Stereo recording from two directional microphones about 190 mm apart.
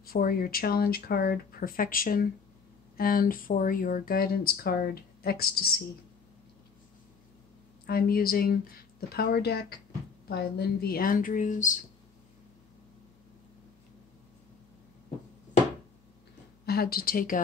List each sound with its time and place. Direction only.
0.0 s speech: 50° left (ahead or behind)
7.8 s speech: 50° left (ahead or behind)
16.6 s a woman's voice: 55° left (ahead or behind)